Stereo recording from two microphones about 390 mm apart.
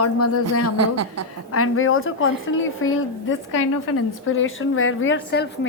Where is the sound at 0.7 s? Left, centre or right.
Right.